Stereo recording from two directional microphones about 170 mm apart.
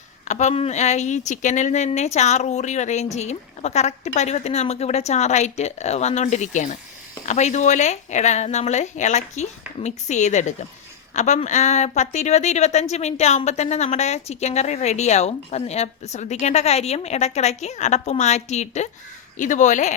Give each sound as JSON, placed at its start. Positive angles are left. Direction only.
{"t": 0.3, "sound": "speech", "side_deg": 45}